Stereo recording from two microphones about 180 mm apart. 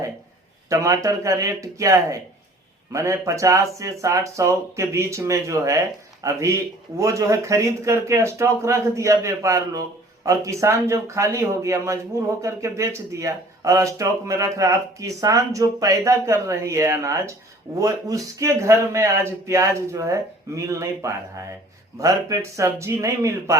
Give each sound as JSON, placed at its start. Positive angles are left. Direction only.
{"t": 0.7, "sound": "speech", "side_deg": -20}